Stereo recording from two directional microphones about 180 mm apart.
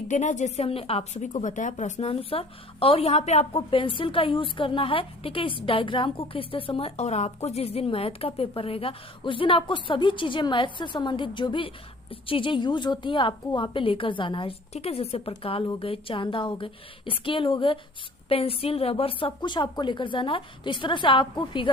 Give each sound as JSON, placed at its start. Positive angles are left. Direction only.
{"t": 0.1, "sound": "a woman's voice", "side_deg": 45}